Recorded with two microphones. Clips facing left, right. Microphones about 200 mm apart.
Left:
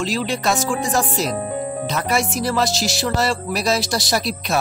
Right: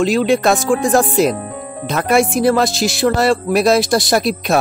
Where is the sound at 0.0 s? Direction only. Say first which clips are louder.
Right 8 dB; 55° right (ahead or behind).